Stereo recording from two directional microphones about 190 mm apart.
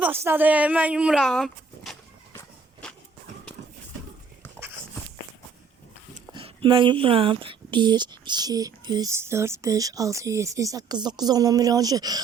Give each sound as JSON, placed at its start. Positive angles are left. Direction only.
{"t": 0.0, "sound": "speech", "side_deg": -10}
{"t": 2.8, "sound": "walk", "side_deg": 5}
{"t": 6.3, "sound": "speech", "side_deg": -25}